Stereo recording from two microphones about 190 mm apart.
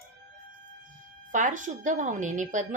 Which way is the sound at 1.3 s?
40° right (ahead or behind).